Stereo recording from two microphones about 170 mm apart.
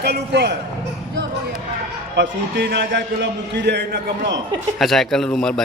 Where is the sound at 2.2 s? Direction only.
80° right.